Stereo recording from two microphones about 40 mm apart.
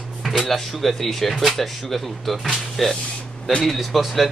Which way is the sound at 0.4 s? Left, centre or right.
Centre.